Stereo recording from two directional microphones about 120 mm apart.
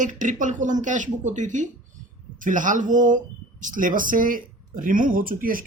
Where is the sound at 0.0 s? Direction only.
90° right.